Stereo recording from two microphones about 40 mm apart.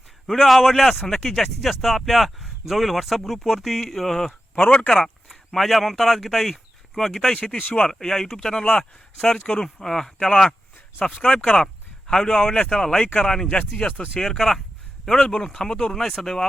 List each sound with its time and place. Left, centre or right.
0.3 s speech: centre
1.0 s speech: centre
1.3 s speech: centre
4.5 s speech: left
4.9 s speech: centre
5.5 s speech: centre
7.5 s speech: left
7.9 s speech: centre
11.0 s speech: left; by 16.5 s centre